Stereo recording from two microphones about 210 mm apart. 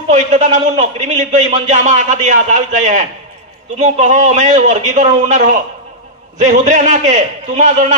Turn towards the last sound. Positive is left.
turn(degrees=-35)  # may be behind; listen again after turning